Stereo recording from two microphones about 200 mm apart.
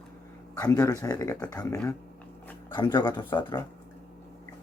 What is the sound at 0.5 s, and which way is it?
Speech, 15° left (ahead or behind).